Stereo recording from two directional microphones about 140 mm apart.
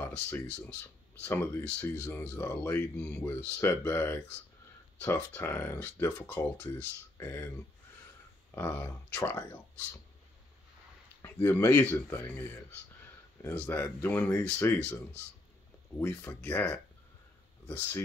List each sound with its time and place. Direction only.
0.0 s speech: 15° left (ahead or behind)
8.5 s speech: 15° left (ahead or behind)
11.2 s speech: 15° left (ahead or behind)
13.4 s speech: 15° left (ahead or behind)
16.0 s speech: 15° left (ahead or behind)